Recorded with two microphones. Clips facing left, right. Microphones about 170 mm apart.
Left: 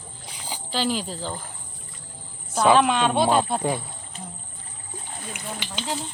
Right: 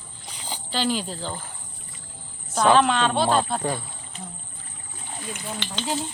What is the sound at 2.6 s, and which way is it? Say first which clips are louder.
Speech: even; 10° left (ahead or behind).